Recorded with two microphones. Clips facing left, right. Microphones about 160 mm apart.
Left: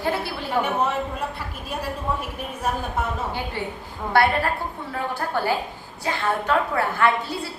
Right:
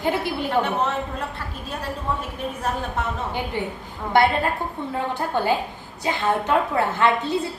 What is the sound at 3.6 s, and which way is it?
A woman's voice, 15° right (ahead or behind).